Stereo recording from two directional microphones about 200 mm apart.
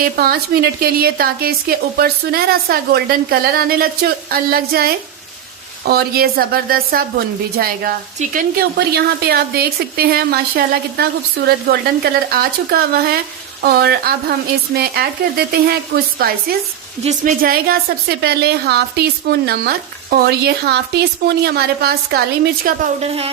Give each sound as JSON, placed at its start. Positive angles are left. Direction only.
{"t": 0.0, "sound": "a woman's voice", "side_deg": -50}
{"t": 17.0, "sound": "a woman's voice", "side_deg": -35}
{"t": 23.0, "sound": "speech", "side_deg": -30}